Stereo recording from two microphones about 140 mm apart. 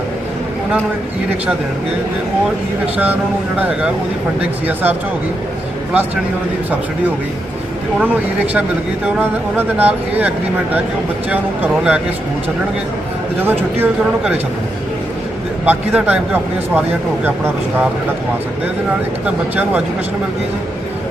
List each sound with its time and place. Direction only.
3.6 s speech: 5° right (ahead or behind)
9.1 s speech: 15° right (ahead or behind)
13.4 s speech: 15° right (ahead or behind)
15.6 s speech: 10° right (ahead or behind)
19.2 s speech: 10° right (ahead or behind)